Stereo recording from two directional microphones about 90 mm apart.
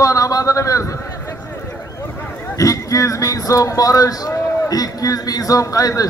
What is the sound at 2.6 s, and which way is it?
A man's voice, 40° left (ahead or behind).